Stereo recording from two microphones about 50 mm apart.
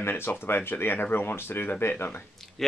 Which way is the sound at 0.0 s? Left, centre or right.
Left.